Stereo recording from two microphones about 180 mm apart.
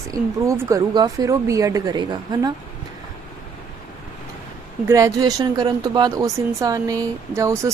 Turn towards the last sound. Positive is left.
turn(degrees=-15)  # may be behind; listen again after turning